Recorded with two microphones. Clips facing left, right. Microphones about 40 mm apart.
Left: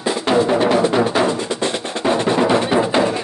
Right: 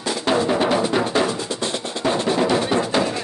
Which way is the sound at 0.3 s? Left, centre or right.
Centre.